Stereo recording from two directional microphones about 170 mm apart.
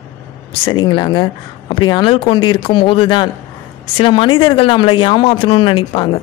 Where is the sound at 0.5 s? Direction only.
30° left (ahead or behind).